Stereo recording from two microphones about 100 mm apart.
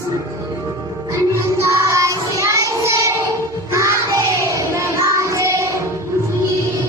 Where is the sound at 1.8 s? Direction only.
30° right (ahead or behind).